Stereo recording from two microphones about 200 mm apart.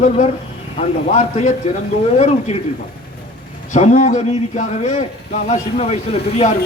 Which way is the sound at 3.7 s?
35° left (ahead or behind).